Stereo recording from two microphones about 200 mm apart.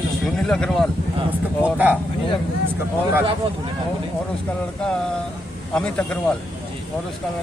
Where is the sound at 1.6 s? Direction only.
10° right (ahead or behind).